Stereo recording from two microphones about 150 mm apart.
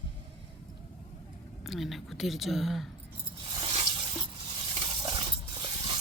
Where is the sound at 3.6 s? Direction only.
40° right (ahead or behind).